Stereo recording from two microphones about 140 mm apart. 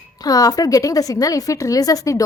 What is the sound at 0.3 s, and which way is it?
A woman's voice, 25° left (ahead or behind).